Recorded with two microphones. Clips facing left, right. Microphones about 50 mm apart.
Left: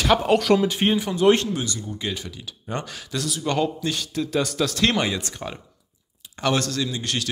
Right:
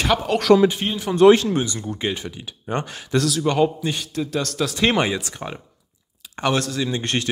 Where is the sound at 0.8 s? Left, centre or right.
Left.